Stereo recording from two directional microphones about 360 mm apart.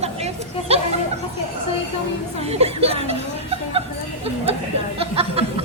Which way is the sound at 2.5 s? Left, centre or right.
Centre.